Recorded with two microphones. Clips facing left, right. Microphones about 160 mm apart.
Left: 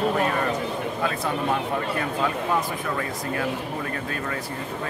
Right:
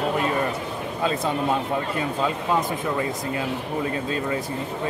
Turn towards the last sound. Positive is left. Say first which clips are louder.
# right 4 dB
turn(degrees=-20)  # may be behind; listen again after turning